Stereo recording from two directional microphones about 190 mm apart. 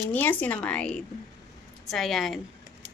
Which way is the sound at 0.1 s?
10° left (ahead or behind).